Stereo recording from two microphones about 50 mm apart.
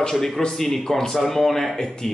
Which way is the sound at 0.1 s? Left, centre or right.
Centre.